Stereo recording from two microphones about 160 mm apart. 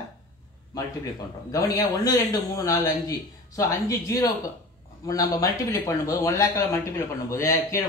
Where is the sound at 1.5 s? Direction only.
20° left (ahead or behind).